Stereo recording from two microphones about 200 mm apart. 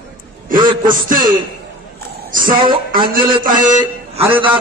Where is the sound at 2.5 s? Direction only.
25° right (ahead or behind).